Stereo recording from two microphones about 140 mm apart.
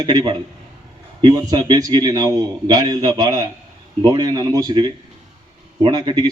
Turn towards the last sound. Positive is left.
turn(degrees=-30)  # may be behind; listen again after turning